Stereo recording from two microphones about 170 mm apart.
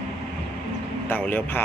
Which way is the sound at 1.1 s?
10° left (ahead or behind).